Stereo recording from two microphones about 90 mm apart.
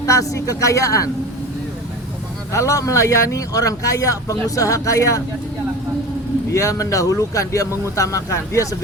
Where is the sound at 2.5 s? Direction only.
35° left (ahead or behind).